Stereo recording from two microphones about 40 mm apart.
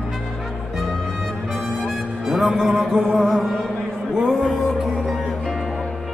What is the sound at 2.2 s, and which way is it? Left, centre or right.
Music, centre.